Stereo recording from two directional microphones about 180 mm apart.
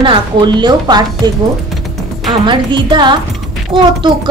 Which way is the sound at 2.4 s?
25° right (ahead or behind).